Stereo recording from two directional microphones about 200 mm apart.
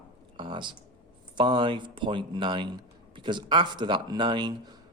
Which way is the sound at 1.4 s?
25° right (ahead or behind).